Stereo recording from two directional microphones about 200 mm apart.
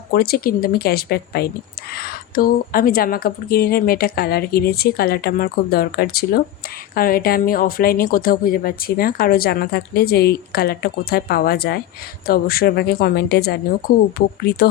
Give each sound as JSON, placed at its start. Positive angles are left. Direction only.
{"t": 0.1, "sound": "a woman's voice", "side_deg": 50}